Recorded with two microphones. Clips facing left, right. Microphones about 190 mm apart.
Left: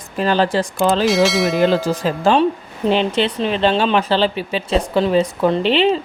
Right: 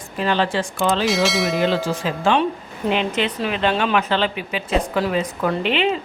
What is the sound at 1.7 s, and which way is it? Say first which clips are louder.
Speech: left 4 dB; 40° left (ahead or behind).